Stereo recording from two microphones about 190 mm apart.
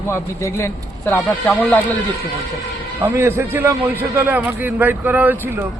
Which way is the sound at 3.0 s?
10° right (ahead or behind).